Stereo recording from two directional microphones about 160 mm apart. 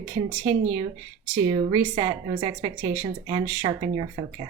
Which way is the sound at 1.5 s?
30° right (ahead or behind).